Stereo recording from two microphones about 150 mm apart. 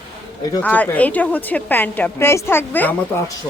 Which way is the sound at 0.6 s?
10° left (ahead or behind).